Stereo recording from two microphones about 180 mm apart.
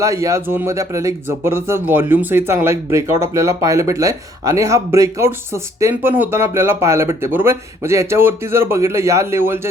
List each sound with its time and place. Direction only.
0.0 s speech: 20° right (ahead or behind)